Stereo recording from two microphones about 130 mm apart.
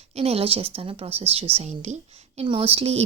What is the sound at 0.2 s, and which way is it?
Speech, 50° right (ahead or behind).